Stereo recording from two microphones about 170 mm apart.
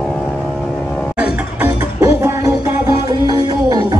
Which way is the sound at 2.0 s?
20° right (ahead or behind).